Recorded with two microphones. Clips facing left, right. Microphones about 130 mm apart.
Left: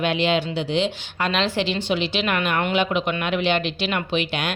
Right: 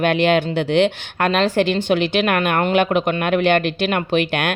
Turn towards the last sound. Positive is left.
turn(degrees=-55)  # may be behind; listen again after turning